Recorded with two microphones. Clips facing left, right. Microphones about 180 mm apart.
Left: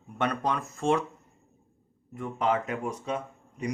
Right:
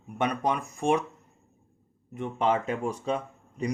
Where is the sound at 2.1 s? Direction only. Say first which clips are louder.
Right 1 dB; 25° right (ahead or behind).